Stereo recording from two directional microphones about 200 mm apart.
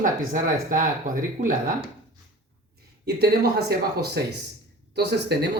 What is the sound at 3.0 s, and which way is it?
A woman's voice, 55° right (ahead or behind).